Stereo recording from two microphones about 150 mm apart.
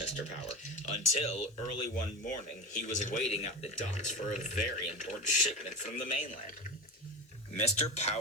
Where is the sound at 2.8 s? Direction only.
50° left (ahead or behind).